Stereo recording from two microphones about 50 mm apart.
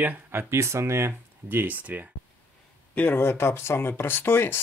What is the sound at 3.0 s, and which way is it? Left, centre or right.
Speech, left.